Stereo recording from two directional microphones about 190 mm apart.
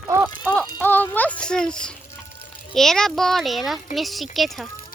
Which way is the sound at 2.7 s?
Centre (ahead or behind).